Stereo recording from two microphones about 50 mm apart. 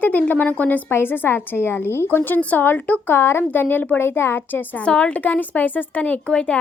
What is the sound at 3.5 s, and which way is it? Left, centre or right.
Speech, left.